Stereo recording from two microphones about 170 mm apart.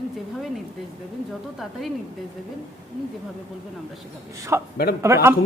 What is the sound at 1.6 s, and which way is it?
Speech, centre (ahead or behind).